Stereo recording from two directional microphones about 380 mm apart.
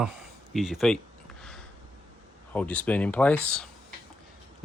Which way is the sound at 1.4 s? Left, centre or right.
Centre.